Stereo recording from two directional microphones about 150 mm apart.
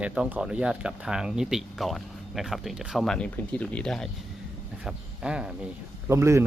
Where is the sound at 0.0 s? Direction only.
5° right (ahead or behind).